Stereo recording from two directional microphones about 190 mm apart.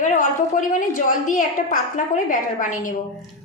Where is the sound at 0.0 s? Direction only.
45° left (ahead or behind).